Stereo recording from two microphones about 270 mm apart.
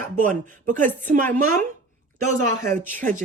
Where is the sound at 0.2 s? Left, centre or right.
Right.